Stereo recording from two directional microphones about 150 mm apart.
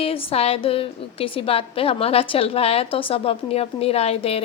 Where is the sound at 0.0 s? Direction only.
40° left (ahead or behind).